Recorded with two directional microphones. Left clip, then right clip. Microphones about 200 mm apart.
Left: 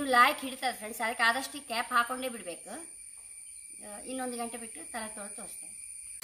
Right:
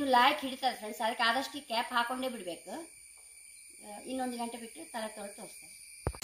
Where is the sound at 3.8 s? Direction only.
10° left (ahead or behind).